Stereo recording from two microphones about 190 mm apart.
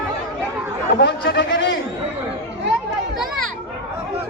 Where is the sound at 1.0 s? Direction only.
65° left (ahead or behind).